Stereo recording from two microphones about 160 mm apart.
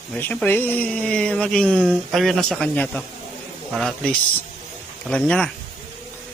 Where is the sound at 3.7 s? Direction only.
Centre (ahead or behind).